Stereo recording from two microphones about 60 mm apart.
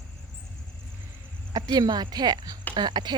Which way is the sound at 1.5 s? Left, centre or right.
Right.